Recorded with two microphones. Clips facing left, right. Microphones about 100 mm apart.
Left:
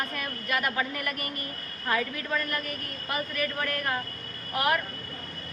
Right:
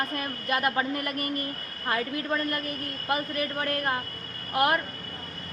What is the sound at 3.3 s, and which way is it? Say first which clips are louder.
Speech: right 1 dB; 35° right (ahead or behind).